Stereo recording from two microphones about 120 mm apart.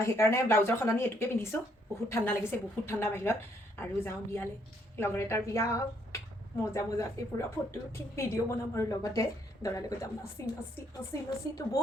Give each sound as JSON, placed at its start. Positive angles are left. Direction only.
{"t": 0.0, "sound": "a woman's voice", "side_deg": 25}